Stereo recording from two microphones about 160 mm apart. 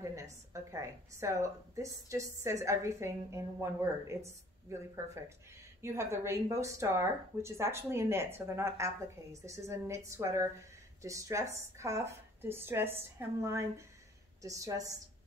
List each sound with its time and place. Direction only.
0.0 s a woman's voice: 20° right (ahead or behind)